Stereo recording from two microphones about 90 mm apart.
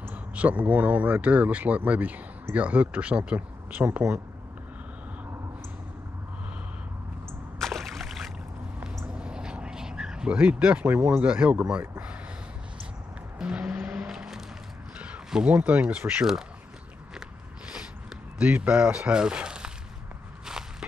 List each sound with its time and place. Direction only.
0.0 s speech: 15° right (ahead or behind)
7.5 s rowboat: centre (ahead or behind)
9.1 s a sound: 10° right (ahead or behind)
11.7 s speech: 25° right (ahead or behind)
13.4 s vehicle: 15° right (ahead or behind)
13.9 s music: 5° right (ahead or behind)
15.0 s speech: 15° right (ahead or behind)
18.4 s speech: 15° right (ahead or behind)